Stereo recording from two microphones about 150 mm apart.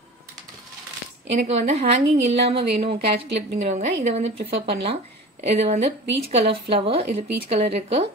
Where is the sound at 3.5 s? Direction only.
50° right (ahead or behind).